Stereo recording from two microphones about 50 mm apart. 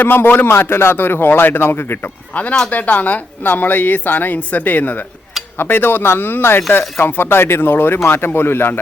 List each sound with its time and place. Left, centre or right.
0.0 s speech: left
0.5 s speech: left
2.3 s speech: left
5.5 s speech: left